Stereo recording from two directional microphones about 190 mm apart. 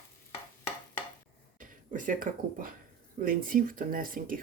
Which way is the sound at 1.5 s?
45° right (ahead or behind).